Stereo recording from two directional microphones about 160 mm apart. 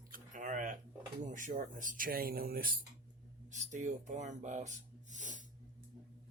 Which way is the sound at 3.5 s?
50° right (ahead or behind).